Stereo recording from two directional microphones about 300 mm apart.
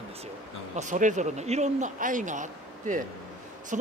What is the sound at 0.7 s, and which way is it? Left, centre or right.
Speech, right.